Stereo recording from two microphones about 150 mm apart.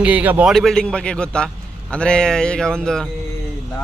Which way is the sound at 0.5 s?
5° left (ahead or behind).